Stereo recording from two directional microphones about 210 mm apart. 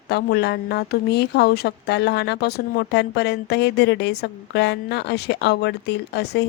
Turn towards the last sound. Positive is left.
turn(degrees=55)  # may be behind; listen again after turning